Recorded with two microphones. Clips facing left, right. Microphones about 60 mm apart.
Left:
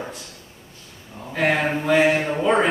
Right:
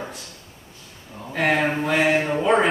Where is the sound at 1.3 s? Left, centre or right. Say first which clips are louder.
Even; centre.